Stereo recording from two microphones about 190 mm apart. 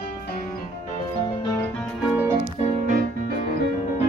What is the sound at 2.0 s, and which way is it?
Music, 10° right (ahead or behind).